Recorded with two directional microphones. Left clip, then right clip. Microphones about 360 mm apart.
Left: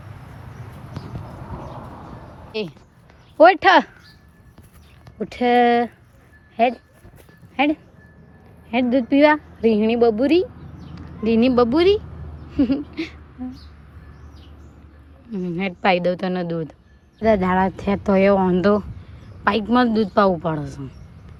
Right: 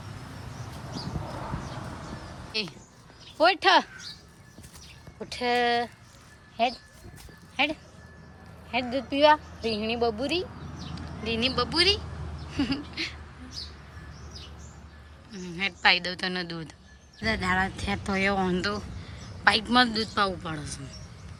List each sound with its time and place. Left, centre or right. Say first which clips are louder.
2.5 s speech: left 4 dB; centre
3.3 s speech: left 9 dB; centre
5.3 s speech: left 9 dB; centre
11.3 s speech: left 10 dB; centre
12.5 s a sound: left 9 dB; centre
15.3 s speech: left 5 dB; centre